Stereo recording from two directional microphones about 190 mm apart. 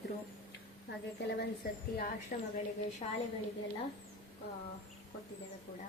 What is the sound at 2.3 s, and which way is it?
Speech, 45° left (ahead or behind).